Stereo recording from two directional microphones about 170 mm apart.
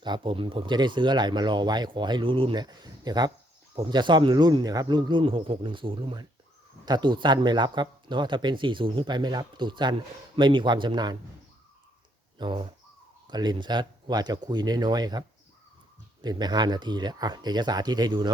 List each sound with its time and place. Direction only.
0.0 s speech: 30° right (ahead or behind)
12.4 s speech: 30° right (ahead or behind)
16.2 s speech: 25° right (ahead or behind)